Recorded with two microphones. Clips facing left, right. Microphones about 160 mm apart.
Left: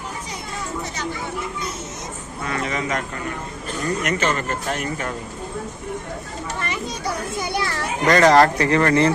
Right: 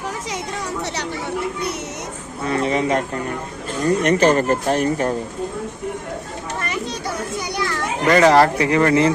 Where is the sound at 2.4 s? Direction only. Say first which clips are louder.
Right 6 dB; 30° right (ahead or behind).